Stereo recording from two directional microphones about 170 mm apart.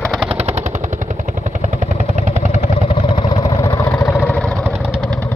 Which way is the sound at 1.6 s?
45° right (ahead or behind).